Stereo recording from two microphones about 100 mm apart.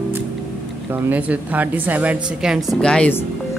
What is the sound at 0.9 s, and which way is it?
A woman's voice, 15° right (ahead or behind).